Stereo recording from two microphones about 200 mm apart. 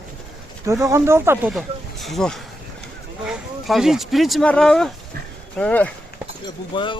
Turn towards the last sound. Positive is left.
turn(degrees=25)  # may be behind; listen again after turning